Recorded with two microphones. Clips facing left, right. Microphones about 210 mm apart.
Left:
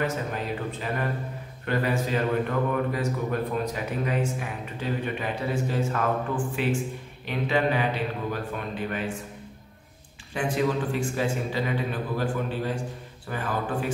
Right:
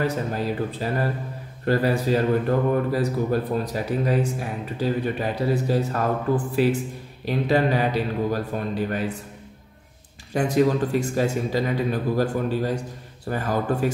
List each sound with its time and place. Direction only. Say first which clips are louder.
0.0 s speech: right 4 dB; 35° right (ahead or behind)
10.3 s speech: right 6 dB; 40° right (ahead or behind)